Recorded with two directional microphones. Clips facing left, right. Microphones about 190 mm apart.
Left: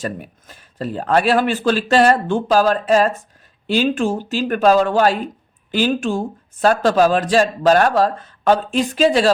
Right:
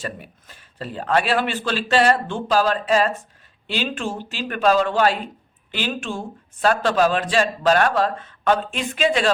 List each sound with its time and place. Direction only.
0.0 s speech: 45° left (ahead or behind)